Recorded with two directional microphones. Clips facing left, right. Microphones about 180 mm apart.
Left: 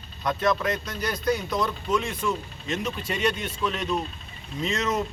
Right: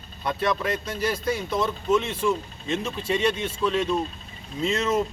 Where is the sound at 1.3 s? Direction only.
25° right (ahead or behind).